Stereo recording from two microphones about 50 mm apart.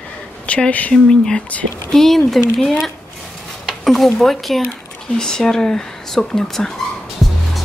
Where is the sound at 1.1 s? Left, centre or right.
Centre.